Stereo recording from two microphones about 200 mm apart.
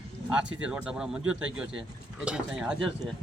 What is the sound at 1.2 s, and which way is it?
Speech, 85° right.